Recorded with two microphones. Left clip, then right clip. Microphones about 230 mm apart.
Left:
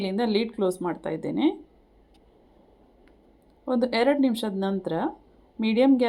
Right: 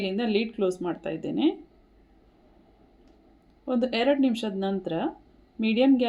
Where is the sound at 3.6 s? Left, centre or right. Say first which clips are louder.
Left 2 dB; centre.